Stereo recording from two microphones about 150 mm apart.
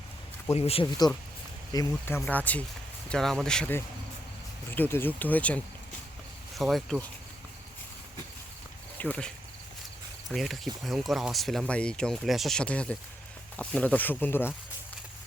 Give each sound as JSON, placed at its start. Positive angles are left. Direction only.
{"t": 0.5, "sound": "speech", "side_deg": 40}
{"t": 0.9, "sound": "speech", "side_deg": 25}
{"t": 9.0, "sound": "speech", "side_deg": 10}